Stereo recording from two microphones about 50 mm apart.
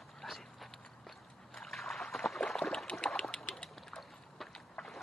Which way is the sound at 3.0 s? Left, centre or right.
Left.